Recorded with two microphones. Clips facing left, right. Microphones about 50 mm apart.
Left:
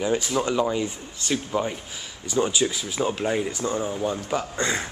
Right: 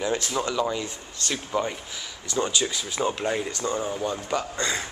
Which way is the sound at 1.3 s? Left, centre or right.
Centre.